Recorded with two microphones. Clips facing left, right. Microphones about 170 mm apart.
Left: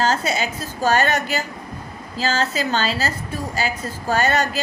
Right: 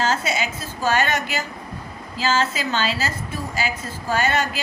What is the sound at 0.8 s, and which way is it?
A woman's voice, 40° left (ahead or behind).